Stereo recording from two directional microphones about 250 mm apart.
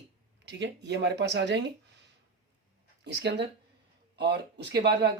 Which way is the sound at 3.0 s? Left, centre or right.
Right.